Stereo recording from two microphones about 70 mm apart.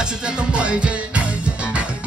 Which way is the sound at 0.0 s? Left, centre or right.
Centre.